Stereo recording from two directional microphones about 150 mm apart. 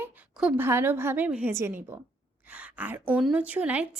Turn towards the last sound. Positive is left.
turn(degrees=-10)  # may be behind; listen again after turning